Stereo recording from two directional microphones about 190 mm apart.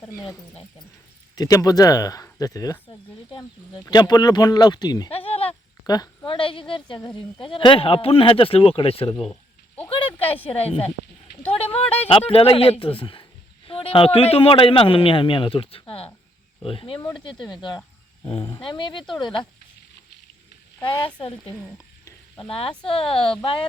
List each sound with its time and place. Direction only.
0.3 s speech: centre (ahead or behind)
1.4 s a man's voice: 20° left (ahead or behind)
5.8 s a man's voice: 20° left (ahead or behind)
9.3 s a sound: 10° left (ahead or behind)
10.2 s speech: 10° left (ahead or behind)
11.5 s a man's voice: 30° left (ahead or behind)
21.2 s a man's voice: 30° left (ahead or behind)
21.5 s a sound: 15° left (ahead or behind)
22.7 s speech: 5° left (ahead or behind)